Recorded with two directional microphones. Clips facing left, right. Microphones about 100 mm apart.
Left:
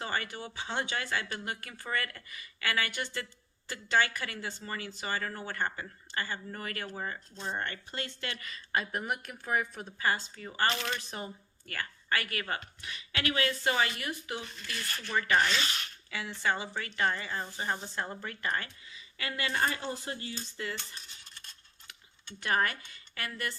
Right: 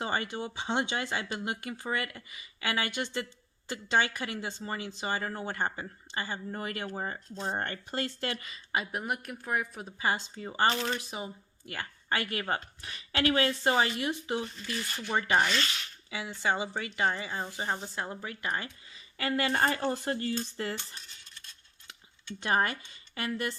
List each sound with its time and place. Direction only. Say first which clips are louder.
0.0 s speech: right 3 dB; 20° right (ahead or behind); by 8.4 s 40° right (ahead or behind)
8.4 s a woman's voice: even; 20° right (ahead or behind); by 9.8 s centre (ahead or behind)
10.0 s speech: right 1 dB; 20° right (ahead or behind)
17.7 s speech: right 1 dB; 10° right (ahead or behind)
18.9 s a sound: right 7 dB; 35° right (ahead or behind)
19.5 s speech: right 4 dB; 45° right (ahead or behind)
22.4 s speech: right 2 dB; 25° right (ahead or behind)